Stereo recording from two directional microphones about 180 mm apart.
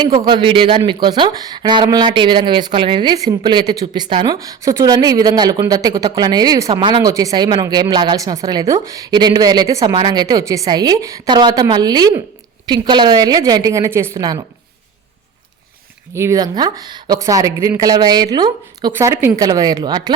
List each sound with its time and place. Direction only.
0.0 s speech: 25° right (ahead or behind)
16.1 s speech: 15° right (ahead or behind)
18.9 s speech: 15° right (ahead or behind)